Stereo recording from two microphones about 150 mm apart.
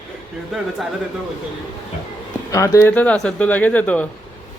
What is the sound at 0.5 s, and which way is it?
Speech, centre (ahead or behind).